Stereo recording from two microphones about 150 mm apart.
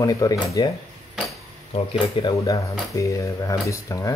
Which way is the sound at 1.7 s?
35° left (ahead or behind).